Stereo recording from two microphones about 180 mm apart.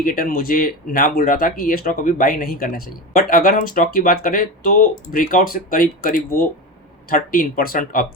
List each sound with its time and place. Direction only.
0.0 s speech: 50° left (ahead or behind)